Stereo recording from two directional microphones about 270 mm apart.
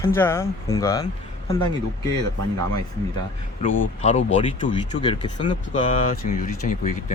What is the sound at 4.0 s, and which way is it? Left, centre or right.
Speech, left.